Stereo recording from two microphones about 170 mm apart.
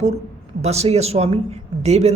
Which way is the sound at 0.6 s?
40° right (ahead or behind).